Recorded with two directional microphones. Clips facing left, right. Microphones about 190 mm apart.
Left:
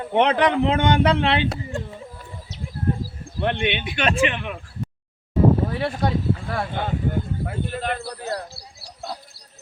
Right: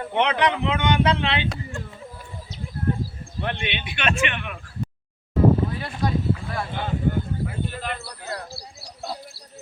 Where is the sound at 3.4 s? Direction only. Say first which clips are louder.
Left 6 dB; 45° left (ahead or behind); by 4.5 s 30° left (ahead or behind).